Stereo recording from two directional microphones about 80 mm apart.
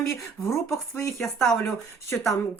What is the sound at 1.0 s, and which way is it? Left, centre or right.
Speech, left.